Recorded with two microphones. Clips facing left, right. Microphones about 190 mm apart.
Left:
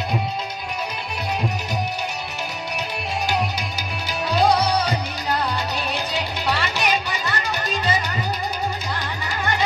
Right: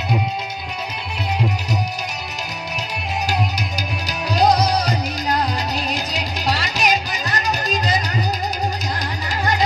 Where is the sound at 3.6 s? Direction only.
40° right (ahead or behind).